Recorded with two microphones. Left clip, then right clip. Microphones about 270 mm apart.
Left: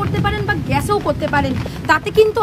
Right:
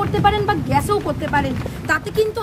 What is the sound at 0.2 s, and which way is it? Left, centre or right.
Vehicle, right.